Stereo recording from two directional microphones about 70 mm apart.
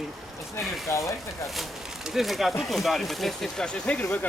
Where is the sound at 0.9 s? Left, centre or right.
Left.